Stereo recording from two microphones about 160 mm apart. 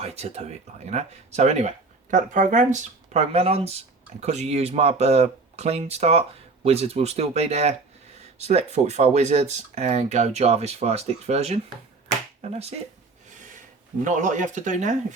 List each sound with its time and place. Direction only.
0.0 s speech: 40° right (ahead or behind)
14.0 s speech: 50° right (ahead or behind)